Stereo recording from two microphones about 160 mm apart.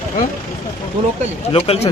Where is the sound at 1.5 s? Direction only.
40° left (ahead or behind).